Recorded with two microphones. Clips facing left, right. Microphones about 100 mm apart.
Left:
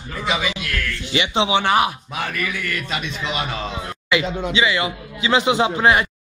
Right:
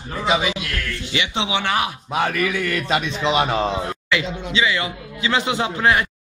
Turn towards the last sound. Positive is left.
turn(degrees=20)  # may be behind; listen again after turning